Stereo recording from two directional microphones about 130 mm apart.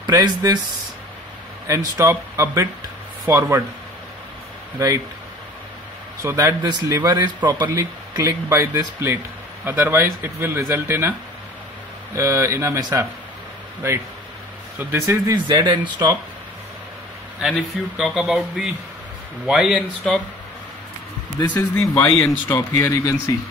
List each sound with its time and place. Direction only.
0.0 s speech: 35° right (ahead or behind)
2.0 s speech: 25° right (ahead or behind)
4.7 s speech: 25° right (ahead or behind)
6.2 s speech: 25° right (ahead or behind)
12.2 s speech: 20° right (ahead or behind)
14.8 s speech: 20° right (ahead or behind)
15.4 s speech: 35° right (ahead or behind)
17.4 s speech: centre (ahead or behind)
21.5 s speech: 20° left (ahead or behind)